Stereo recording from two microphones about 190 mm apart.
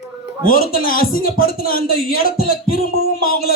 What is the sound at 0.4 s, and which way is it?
A man's voice, 50° left (ahead or behind).